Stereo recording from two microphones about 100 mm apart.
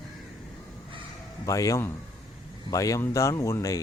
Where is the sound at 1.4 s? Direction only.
35° left (ahead or behind).